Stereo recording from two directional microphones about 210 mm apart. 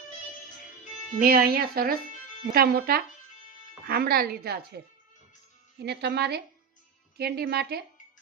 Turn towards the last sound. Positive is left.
turn(degrees=-50)  # may be behind; listen again after turning